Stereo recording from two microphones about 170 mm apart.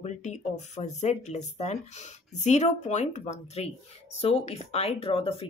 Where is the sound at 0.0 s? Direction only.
45° left (ahead or behind).